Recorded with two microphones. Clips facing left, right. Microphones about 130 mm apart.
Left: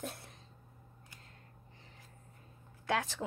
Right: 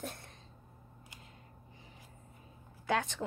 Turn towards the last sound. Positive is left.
turn(degrees=0)  # may be behind; listen again after turning